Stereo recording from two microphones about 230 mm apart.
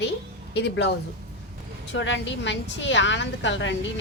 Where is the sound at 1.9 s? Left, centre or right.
Left.